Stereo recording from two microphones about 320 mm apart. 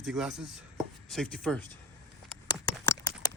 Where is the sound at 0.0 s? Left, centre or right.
Centre.